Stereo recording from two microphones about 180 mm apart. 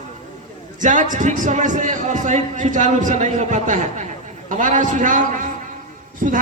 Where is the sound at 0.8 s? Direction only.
45° right (ahead or behind).